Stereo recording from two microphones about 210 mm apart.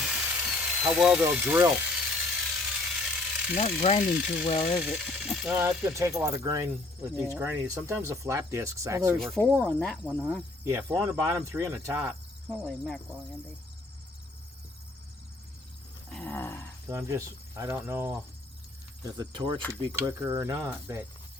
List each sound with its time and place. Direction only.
0.0 s ratchet: 5° right (ahead or behind)
3.6 s speech: 30° left (ahead or behind)
4.8 s speech: centre (ahead or behind)
9.4 s speech: 5° left (ahead or behind)
10.6 s speech: 15° right (ahead or behind)
12.5 s speech: 5° left (ahead or behind)
16.0 s dog: 5° left (ahead or behind)
16.9 s speech: 10° right (ahead or behind)